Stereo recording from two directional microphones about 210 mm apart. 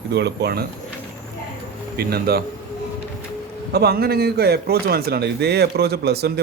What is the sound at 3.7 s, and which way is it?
Speech, 50° right (ahead or behind).